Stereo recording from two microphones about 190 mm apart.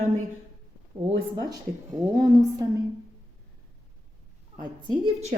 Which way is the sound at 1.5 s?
20° right (ahead or behind).